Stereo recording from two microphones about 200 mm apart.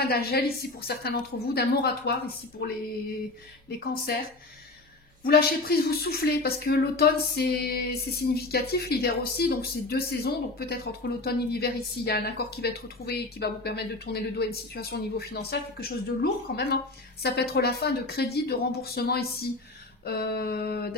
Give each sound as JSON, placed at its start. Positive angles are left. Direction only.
{"t": 0.0, "sound": "speech", "side_deg": 50}
{"t": 3.8, "sound": "speech", "side_deg": 50}